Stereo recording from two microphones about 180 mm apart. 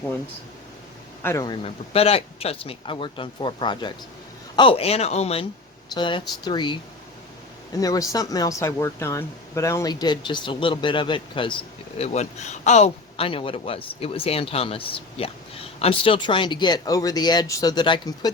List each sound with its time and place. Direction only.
1.2 s a man's voice: 15° left (ahead or behind)
1.5 s a man's voice: 35° left (ahead or behind)
11.9 s a man's voice: 35° left (ahead or behind)